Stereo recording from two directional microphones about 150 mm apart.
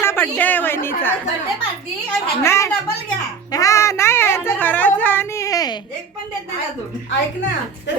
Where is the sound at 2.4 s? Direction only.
15° left (ahead or behind).